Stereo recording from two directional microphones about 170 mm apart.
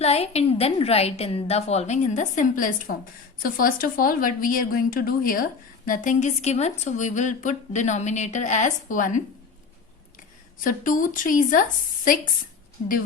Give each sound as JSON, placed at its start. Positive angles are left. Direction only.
{"t": 0.0, "sound": "a woman's voice", "side_deg": 40}
{"t": 10.6, "sound": "a woman's voice", "side_deg": 50}